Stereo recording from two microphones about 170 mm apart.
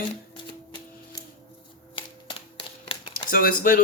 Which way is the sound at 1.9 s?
30° left (ahead or behind).